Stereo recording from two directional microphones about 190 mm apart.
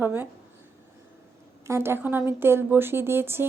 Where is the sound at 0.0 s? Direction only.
10° right (ahead or behind).